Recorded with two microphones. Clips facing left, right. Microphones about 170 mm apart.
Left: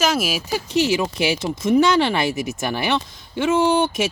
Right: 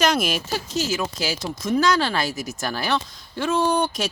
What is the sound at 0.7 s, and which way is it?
Speech, 65° left (ahead or behind).